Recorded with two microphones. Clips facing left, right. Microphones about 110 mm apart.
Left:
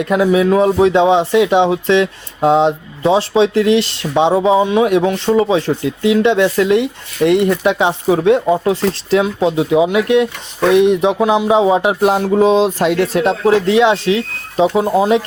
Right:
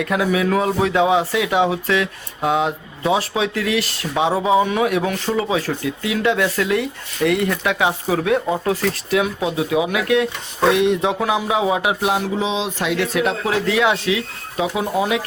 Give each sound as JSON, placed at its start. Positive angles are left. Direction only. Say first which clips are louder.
{"t": 0.0, "sound": "speech", "louder": "left 6 dB", "side_deg": 25}
{"t": 12.0, "sound": "speech", "louder": "left 8 dB", "side_deg": 50}
{"t": 13.7, "sound": "speech", "louder": "left 6 dB", "side_deg": 25}